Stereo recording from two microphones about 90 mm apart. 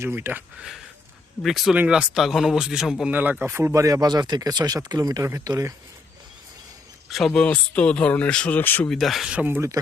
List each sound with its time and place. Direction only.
0.0 s speech: 25° right (ahead or behind)
1.4 s speech: centre (ahead or behind)
1.7 s speech: 10° right (ahead or behind)
3.1 s speech: 20° right (ahead or behind); by 5.7 s 35° right (ahead or behind)
7.1 s speech: 5° left (ahead or behind)
7.4 s speech: 15° left (ahead or behind)
8.9 s speech: centre (ahead or behind)
9.3 s speech: 15° right (ahead or behind)